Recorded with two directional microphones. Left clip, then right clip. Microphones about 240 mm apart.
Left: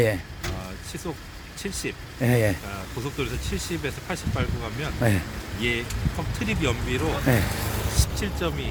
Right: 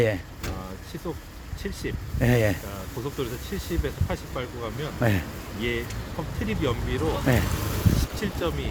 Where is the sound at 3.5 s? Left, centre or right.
Centre.